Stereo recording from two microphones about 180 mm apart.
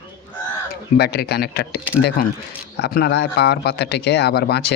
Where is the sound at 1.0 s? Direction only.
65° left (ahead or behind).